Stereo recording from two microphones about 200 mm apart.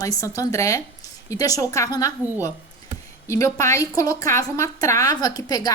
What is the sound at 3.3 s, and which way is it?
A woman's voice, 15° left (ahead or behind).